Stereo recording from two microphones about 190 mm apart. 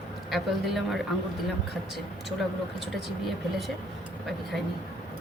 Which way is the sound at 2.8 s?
Centre (ahead or behind).